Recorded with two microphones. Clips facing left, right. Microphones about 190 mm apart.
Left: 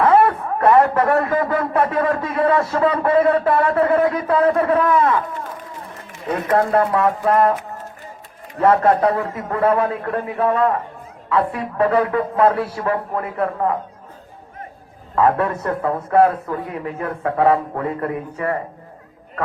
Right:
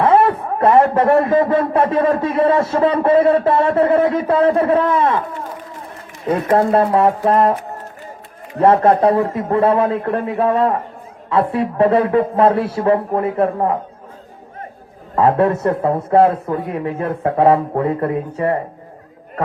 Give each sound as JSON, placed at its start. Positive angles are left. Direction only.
{"t": 0.0, "sound": "a man's voice", "side_deg": -25}
{"t": 6.6, "sound": "a man's voice", "side_deg": -30}
{"t": 15.1, "sound": "a man's voice", "side_deg": -25}